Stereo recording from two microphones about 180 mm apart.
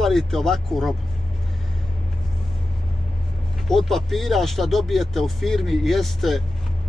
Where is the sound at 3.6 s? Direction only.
Centre (ahead or behind).